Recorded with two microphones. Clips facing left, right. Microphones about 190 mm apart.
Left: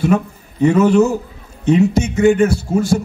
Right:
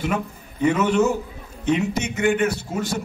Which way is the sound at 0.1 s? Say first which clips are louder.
Left 9 dB; 30° left (ahead or behind).